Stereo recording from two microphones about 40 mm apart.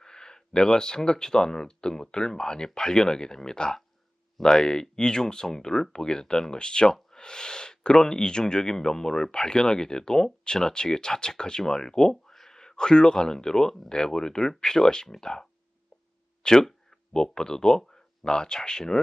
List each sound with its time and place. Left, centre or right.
0.0 s speech: centre